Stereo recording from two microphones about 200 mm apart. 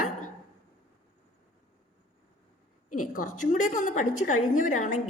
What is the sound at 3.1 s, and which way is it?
A woman's voice, 40° left (ahead or behind).